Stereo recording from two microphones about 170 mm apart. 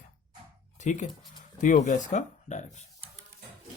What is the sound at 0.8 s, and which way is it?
Speech, 45° left (ahead or behind).